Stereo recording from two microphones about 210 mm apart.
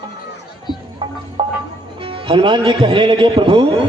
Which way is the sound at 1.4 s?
25° right (ahead or behind).